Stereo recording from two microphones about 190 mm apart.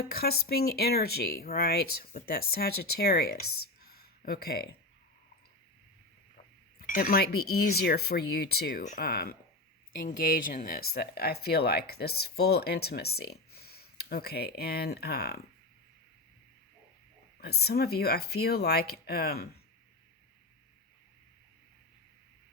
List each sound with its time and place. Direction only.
0.0 s speech: 55° left (ahead or behind)
6.3 s speech: 45° left (ahead or behind)
8.8 s speech: 45° left (ahead or behind)
17.4 s speech: 55° left (ahead or behind)